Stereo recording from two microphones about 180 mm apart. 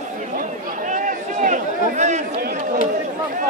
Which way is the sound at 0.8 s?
45° right (ahead or behind).